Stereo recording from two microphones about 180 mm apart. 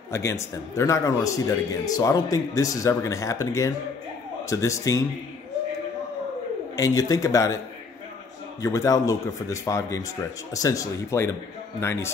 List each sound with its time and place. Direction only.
0.1 s a man's voice: 15° left (ahead or behind)
6.8 s speech: 20° left (ahead or behind)
8.6 s a man's voice: 15° left (ahead or behind)